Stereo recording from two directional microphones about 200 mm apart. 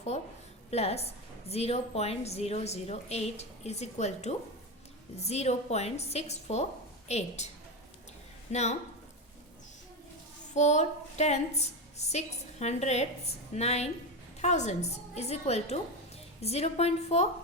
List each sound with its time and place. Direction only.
0.7 s a woman's voice: 30° left (ahead or behind)
10.5 s a woman's voice: 35° left (ahead or behind)